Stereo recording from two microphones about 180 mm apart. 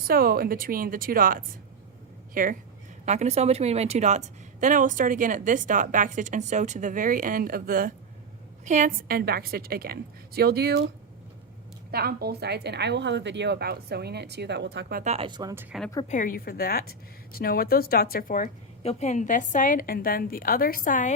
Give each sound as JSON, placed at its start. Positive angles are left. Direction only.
{"t": 0.1, "sound": "a woman's voice", "side_deg": -55}
{"t": 3.1, "sound": "a woman's voice", "side_deg": -35}
{"t": 11.9, "sound": "speech", "side_deg": -60}
{"t": 15.0, "sound": "speech", "side_deg": -35}
{"t": 15.3, "sound": "speech", "side_deg": -20}
{"t": 16.0, "sound": "speech", "side_deg": 50}
{"t": 18.8, "sound": "a woman's voice", "side_deg": 35}